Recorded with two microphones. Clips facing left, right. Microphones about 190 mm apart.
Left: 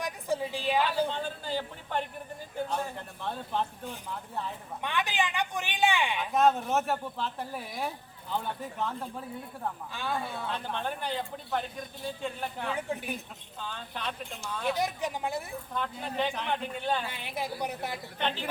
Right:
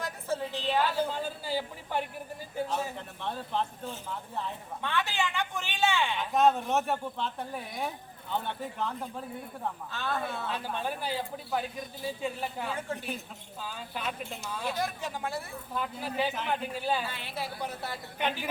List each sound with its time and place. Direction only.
0.0 s a sound: 10° left (ahead or behind)
0.9 s a sound: 5° right (ahead or behind)
2.6 s speech: 5° right (ahead or behind)
4.8 s a man's voice: 15° left (ahead or behind)
6.3 s speech: centre (ahead or behind)
9.9 s a man's voice: 10° left (ahead or behind)
10.5 s speech: 5° right (ahead or behind)
12.7 s a man's voice: 15° left (ahead or behind)
13.6 s speech: 5° right (ahead or behind)
14.7 s a man's voice: 20° left (ahead or behind)
15.7 s speech: 5° right (ahead or behind)
17.1 s a man's voice: 15° left (ahead or behind)
18.2 s speech: 10° right (ahead or behind)